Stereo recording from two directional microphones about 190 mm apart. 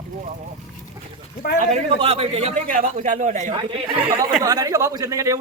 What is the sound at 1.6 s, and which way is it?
A man's voice, 35° right (ahead or behind).